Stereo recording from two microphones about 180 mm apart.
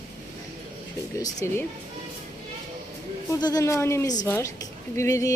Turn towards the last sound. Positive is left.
turn(degrees=15)  # may be behind; listen again after turning